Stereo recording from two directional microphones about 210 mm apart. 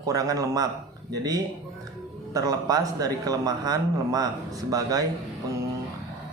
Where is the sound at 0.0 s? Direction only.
15° right (ahead or behind).